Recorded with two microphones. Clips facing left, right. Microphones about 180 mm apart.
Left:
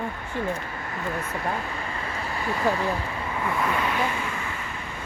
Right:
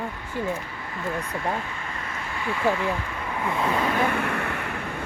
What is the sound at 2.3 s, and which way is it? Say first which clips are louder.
Speech: right 1 dB; 40° left (ahead or behind).